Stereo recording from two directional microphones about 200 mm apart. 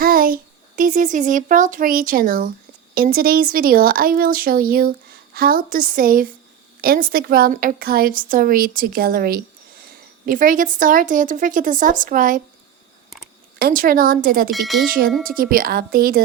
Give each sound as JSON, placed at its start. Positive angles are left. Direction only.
{"t": 0.0, "sound": "a sound", "side_deg": -45}
{"t": 0.8, "sound": "a woman's voice", "side_deg": -40}
{"t": 13.6, "sound": "speech", "side_deg": -45}
{"t": 14.5, "sound": "speech", "side_deg": 0}
{"t": 14.8, "sound": "speech", "side_deg": -45}